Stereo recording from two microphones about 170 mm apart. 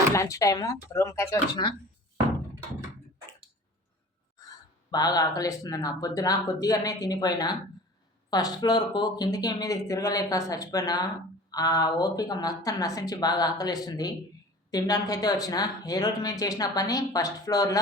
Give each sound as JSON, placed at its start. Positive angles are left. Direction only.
{"t": 0.1, "sound": "speech", "side_deg": 20}
{"t": 4.4, "sound": "a sound", "side_deg": 20}
{"t": 4.9, "sound": "speech", "side_deg": 25}